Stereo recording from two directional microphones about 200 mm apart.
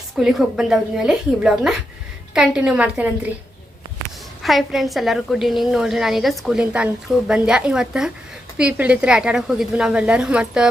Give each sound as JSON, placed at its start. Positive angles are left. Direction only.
{"t": 0.2, "sound": "a woman's voice", "side_deg": -5}
{"t": 4.4, "sound": "a woman's voice", "side_deg": 0}